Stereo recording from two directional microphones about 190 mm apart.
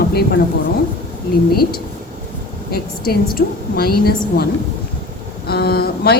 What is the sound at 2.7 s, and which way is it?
A woman's voice, 55° left (ahead or behind).